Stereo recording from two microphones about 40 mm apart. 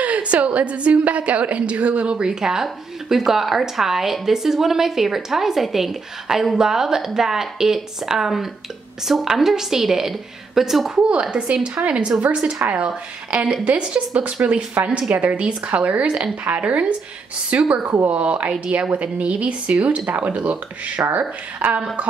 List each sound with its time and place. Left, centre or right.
0.0 s a woman's voice: right; by 10.9 s centre
11.1 s speech: right
17.8 s speech: right
18.1 s speech: right